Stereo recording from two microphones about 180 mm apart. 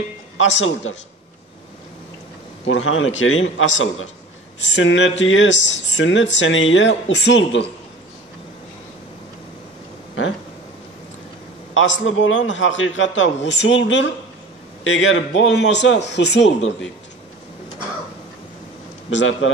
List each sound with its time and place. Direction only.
0.4 s speech: 90° left
2.6 s speech: 90° left
11.7 s speech: 90° left
19.0 s speech: 90° left